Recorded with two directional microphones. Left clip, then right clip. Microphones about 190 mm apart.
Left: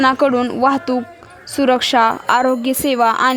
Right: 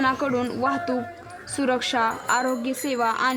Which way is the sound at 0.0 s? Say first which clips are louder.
Left 9 dB; 45° left (ahead or behind).